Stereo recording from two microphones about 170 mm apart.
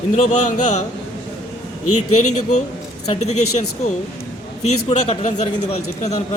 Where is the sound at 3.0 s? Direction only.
40° left (ahead or behind).